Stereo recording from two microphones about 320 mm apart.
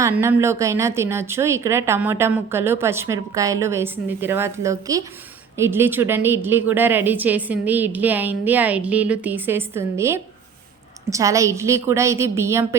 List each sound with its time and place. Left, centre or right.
0.0 s a woman's voice: centre